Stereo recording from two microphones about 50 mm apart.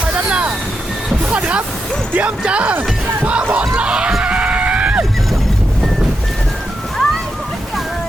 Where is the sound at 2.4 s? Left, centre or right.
Right.